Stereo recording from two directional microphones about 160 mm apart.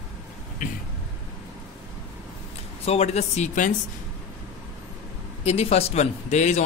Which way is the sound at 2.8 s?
40° left (ahead or behind).